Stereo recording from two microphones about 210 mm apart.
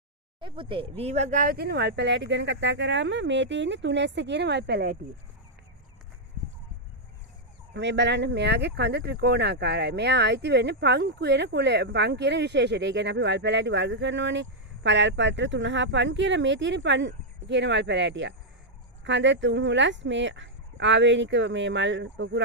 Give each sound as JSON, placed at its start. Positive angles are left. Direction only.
{"t": 0.4, "sound": "speech", "side_deg": -25}
{"t": 7.7, "sound": "speech", "side_deg": -55}